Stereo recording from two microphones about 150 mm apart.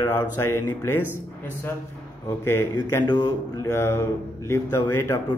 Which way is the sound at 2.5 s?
15° left (ahead or behind).